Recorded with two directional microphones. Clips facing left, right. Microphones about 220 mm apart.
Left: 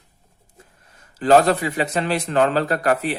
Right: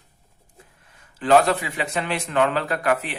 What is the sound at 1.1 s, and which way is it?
A man's voice, 40° left (ahead or behind).